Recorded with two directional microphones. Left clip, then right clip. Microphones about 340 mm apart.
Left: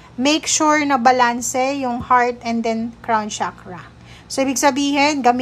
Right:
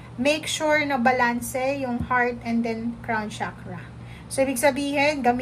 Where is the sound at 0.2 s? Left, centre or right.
Centre.